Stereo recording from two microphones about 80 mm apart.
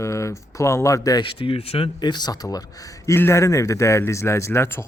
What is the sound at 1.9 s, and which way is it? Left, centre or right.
Speech, left.